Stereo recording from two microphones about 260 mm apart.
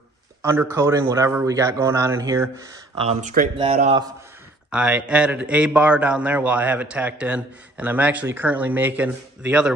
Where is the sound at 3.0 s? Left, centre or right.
Right.